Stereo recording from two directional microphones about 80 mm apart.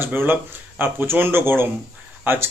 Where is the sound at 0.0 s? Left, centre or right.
Right.